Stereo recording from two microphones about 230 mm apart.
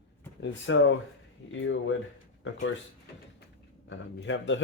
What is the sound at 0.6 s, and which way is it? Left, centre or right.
Speech, left.